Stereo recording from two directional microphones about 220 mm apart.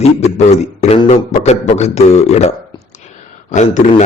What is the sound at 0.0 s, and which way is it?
A man's voice, 30° left (ahead or behind).